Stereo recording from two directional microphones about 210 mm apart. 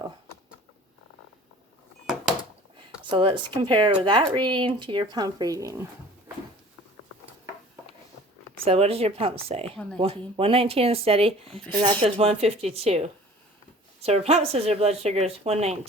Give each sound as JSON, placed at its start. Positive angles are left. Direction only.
{"t": 3.0, "sound": "speech", "side_deg": -25}
{"t": 8.6, "sound": "speech", "side_deg": -30}